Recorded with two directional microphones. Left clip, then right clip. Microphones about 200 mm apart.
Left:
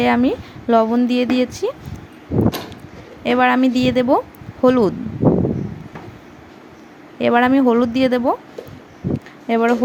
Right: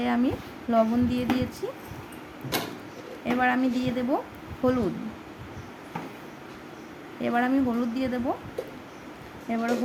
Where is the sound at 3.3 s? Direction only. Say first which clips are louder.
Left 10 dB; 40° left (ahead or behind).